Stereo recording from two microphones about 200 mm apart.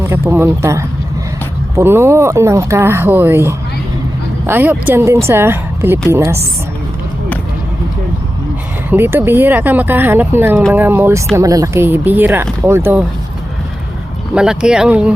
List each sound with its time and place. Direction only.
0.1 s speech: 10° right (ahead or behind)
8.9 s speech: 10° right (ahead or behind)
14.3 s speech: 5° right (ahead or behind)